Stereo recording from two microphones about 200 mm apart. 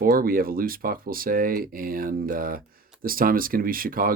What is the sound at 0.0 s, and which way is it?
Speech, 45° right (ahead or behind).